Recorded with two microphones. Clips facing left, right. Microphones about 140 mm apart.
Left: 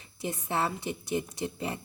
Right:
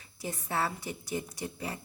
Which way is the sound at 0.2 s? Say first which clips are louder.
Left 2 dB; 25° left (ahead or behind).